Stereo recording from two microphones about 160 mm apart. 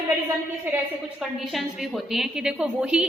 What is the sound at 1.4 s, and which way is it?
A woman's voice, centre (ahead or behind).